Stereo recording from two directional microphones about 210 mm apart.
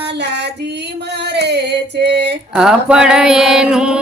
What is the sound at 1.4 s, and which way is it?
Female singing, 55° right (ahead or behind).